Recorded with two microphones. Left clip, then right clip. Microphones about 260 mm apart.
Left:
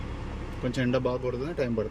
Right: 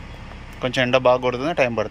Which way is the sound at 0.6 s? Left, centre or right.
Right.